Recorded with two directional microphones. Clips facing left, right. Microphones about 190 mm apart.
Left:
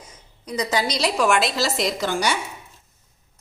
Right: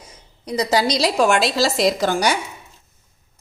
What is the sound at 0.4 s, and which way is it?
A woman's voice, 35° right (ahead or behind).